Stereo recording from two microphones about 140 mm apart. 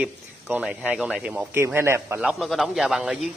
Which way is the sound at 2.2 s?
Centre (ahead or behind).